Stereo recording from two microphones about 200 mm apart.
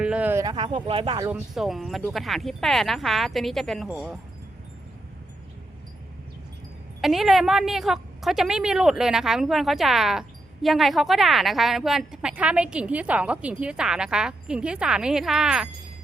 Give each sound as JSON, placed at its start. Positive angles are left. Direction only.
{"t": 0.0, "sound": "speech", "side_deg": -5}
{"t": 1.3, "sound": "a woman's voice", "side_deg": 0}
{"t": 7.0, "sound": "a woman's voice", "side_deg": 0}